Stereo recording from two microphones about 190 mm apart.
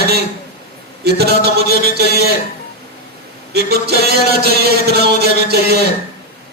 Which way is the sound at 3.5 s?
55° right (ahead or behind).